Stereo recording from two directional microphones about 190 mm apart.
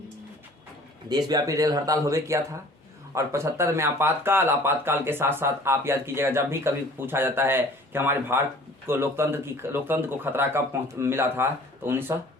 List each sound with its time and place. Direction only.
1.1 s speech: 20° right (ahead or behind)